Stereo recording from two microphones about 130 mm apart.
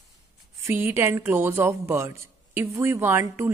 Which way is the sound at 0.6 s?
15° right (ahead or behind).